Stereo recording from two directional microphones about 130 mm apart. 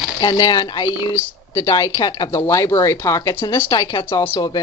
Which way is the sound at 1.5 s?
25° left (ahead or behind).